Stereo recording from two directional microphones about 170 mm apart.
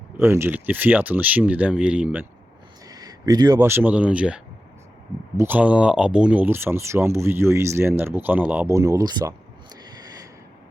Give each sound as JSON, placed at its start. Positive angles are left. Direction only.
{"t": 0.2, "sound": "speech", "side_deg": -15}
{"t": 2.9, "sound": "speech", "side_deg": -20}
{"t": 5.4, "sound": "speech", "side_deg": -10}
{"t": 9.8, "sound": "a sound", "side_deg": -20}